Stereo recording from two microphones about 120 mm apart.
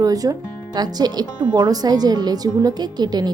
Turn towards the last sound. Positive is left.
turn(degrees=-35)  # may be behind; listen again after turning